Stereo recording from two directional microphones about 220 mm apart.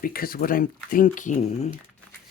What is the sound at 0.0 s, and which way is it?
Speech, 40° left (ahead or behind).